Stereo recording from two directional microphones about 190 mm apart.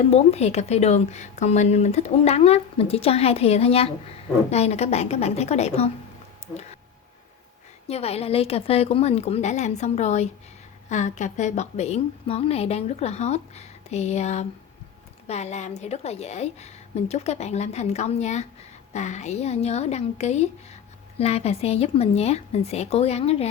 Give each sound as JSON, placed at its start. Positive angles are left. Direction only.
{"t": 0.1, "sound": "a woman's voice", "side_deg": 35}
{"t": 7.9, "sound": "a woman's voice", "side_deg": 35}